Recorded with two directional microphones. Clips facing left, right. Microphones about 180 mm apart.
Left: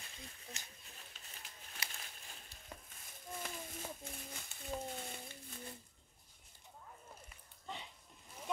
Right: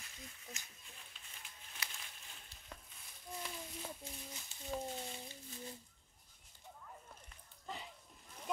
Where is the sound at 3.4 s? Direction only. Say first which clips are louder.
Left 1 dB; 50° left (ahead or behind).